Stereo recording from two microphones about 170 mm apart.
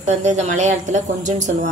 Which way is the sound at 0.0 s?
45° right (ahead or behind).